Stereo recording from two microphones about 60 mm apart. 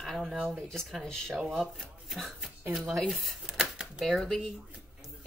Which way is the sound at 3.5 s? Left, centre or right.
Centre.